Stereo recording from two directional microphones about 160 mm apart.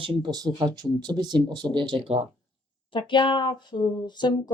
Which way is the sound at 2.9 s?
30° left (ahead or behind).